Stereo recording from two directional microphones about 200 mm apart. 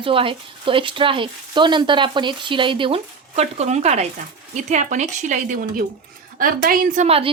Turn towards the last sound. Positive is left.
turn(degrees=-30)  # may be behind; listen again after turning